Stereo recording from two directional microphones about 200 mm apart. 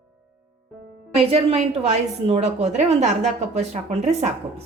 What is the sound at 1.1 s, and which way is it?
Speech, 30° right (ahead or behind).